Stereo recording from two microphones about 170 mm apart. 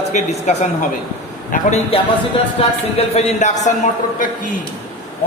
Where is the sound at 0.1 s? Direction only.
45° left (ahead or behind).